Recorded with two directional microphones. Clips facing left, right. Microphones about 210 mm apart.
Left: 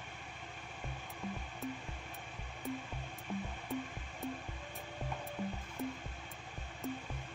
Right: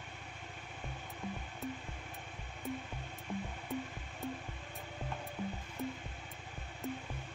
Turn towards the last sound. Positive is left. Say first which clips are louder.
# even
turn(degrees=0)  # may be behind; listen again after turning